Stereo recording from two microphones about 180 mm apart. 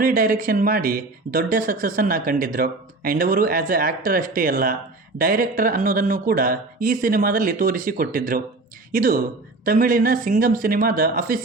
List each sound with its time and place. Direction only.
0.0 s speech: 50° right (ahead or behind)